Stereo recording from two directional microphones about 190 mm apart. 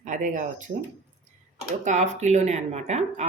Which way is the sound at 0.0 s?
40° right (ahead or behind).